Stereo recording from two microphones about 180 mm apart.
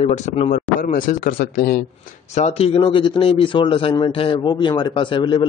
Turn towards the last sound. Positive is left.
turn(degrees=25)  # may be behind; listen again after turning